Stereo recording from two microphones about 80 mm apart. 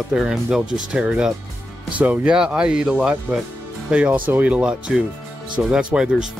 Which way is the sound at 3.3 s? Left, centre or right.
Right.